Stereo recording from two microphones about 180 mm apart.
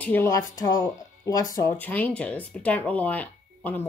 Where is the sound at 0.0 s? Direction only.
10° left (ahead or behind).